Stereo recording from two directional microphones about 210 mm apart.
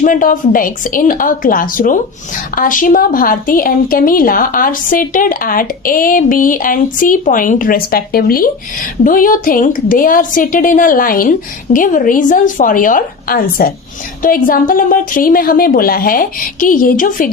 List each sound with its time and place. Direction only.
0.0 s a woman's voice: 40° left (ahead or behind)